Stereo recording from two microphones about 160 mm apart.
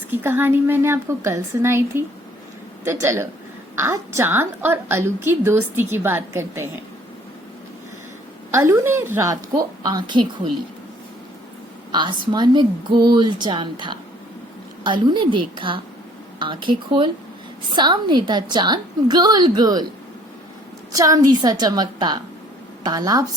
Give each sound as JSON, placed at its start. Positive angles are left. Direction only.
{"t": 0.1, "sound": "a woman's voice", "side_deg": -10}
{"t": 8.5, "sound": "a woman's voice", "side_deg": -20}
{"t": 11.9, "sound": "a woman's voice", "side_deg": -30}
{"t": 20.9, "sound": "a woman's voice", "side_deg": -20}